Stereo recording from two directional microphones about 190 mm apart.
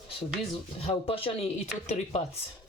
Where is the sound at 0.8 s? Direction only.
30° left (ahead or behind).